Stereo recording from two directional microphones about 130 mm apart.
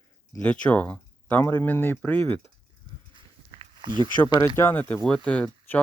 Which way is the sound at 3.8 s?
35° right (ahead or behind).